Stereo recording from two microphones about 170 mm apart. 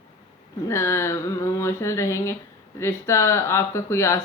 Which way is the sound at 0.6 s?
15° left (ahead or behind).